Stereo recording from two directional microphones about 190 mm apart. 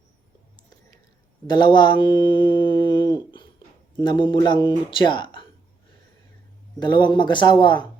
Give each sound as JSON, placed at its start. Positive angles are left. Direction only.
{"t": 1.5, "sound": "mantra", "side_deg": 25}
{"t": 4.0, "sound": "speech", "side_deg": 25}
{"t": 6.7, "sound": "speech", "side_deg": 25}